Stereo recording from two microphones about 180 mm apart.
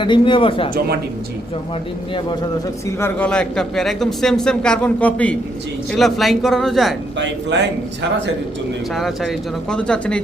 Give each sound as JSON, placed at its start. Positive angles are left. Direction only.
{"t": 0.0, "sound": "speech", "side_deg": 25}
{"t": 2.8, "sound": "a man's voice", "side_deg": 10}
{"t": 7.2, "sound": "speech", "side_deg": -90}
{"t": 8.9, "sound": "a man's voice", "side_deg": 0}